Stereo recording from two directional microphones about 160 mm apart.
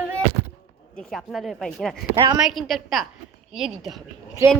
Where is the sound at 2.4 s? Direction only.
Centre (ahead or behind).